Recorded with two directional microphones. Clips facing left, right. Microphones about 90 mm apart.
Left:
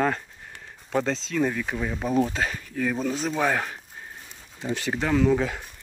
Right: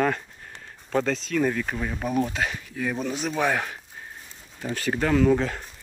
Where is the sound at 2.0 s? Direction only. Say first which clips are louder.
Left 2 dB; 25° left (ahead or behind).